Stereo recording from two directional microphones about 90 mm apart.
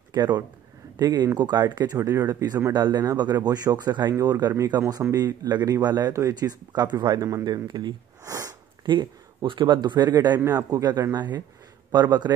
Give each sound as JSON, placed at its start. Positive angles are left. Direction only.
{"t": 0.1, "sound": "speech", "side_deg": -50}
{"t": 2.0, "sound": "speech", "side_deg": -40}
{"t": 4.1, "sound": "speech", "side_deg": -45}
{"t": 6.7, "sound": "speech", "side_deg": -55}
{"t": 7.2, "sound": "speech", "side_deg": -35}
{"t": 8.8, "sound": "speech", "side_deg": -60}